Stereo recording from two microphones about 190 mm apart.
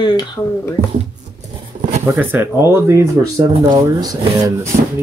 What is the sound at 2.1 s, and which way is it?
Speech, 10° right (ahead or behind).